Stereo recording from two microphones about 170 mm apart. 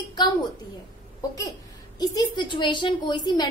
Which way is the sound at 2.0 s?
25° left (ahead or behind).